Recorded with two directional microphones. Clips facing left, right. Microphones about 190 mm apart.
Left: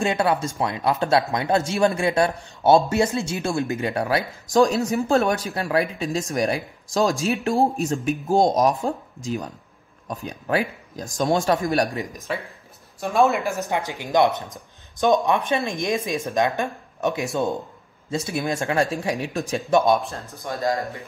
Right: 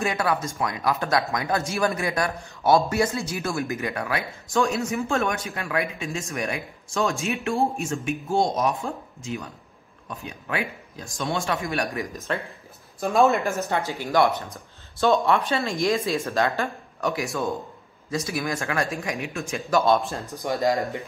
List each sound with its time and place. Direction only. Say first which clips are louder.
0.0 s speech: left 3 dB; 25° left (ahead or behind)
11.9 s speech: left 1 dB; 20° left (ahead or behind)
13.0 s speech: even; centre (ahead or behind)
13.5 s speech: even; 15° left (ahead or behind); by 19.6 s 35° left (ahead or behind)
19.7 s speech: left 2 dB; 15° left (ahead or behind)
20.0 s speech: right 2 dB; centre (ahead or behind)
20.3 s speech: right 2 dB; 15° right (ahead or behind)